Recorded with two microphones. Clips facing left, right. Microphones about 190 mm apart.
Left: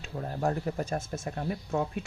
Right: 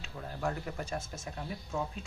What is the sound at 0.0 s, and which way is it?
Speech, 40° left (ahead or behind).